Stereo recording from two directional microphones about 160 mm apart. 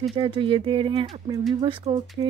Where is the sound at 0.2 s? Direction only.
30° right (ahead or behind).